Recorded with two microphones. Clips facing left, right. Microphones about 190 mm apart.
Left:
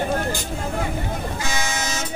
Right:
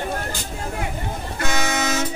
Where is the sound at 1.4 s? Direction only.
60° right (ahead or behind).